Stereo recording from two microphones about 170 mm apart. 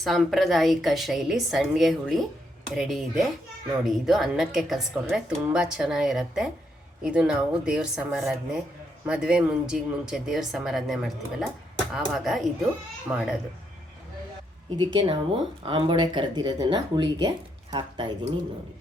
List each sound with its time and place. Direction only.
0.0 s speech: centre (ahead or behind)
14.9 s speech: 30° right (ahead or behind)